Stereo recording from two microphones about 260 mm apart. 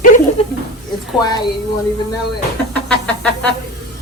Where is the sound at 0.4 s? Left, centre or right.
Left.